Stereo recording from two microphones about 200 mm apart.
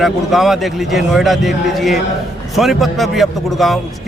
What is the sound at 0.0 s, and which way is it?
A man's voice, centre (ahead or behind).